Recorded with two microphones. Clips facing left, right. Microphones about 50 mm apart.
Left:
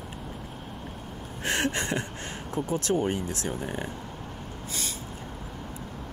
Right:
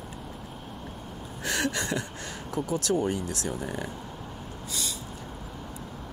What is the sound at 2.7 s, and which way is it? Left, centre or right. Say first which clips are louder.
Speech: even; left.